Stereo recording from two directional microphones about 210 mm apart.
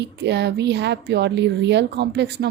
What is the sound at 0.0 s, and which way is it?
A woman's voice, 55° right (ahead or behind).